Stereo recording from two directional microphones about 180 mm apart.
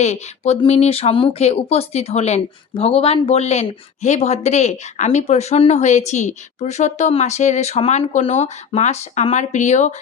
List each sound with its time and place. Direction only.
0.0 s speech: 35° left (ahead or behind)